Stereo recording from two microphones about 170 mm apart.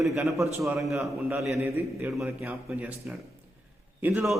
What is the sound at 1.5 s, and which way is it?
A man's voice, 10° right (ahead or behind).